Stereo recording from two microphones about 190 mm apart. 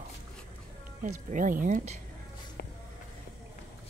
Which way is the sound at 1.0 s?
45° right (ahead or behind).